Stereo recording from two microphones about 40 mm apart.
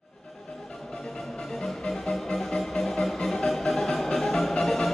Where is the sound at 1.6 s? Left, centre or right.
Centre.